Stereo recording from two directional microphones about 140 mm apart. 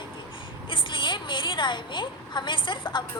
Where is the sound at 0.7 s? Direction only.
35° left (ahead or behind).